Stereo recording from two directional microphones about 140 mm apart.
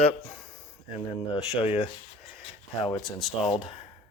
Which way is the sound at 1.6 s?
40° left (ahead or behind).